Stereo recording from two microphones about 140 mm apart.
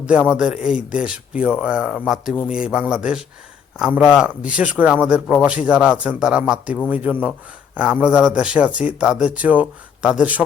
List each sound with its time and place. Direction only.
0.3 s speech: 5° right (ahead or behind)